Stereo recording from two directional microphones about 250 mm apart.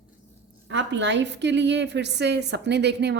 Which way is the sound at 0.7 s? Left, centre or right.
Right.